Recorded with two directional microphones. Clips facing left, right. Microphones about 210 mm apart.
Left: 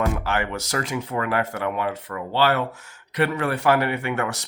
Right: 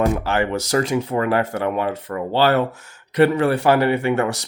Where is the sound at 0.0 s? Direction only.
35° right (ahead or behind).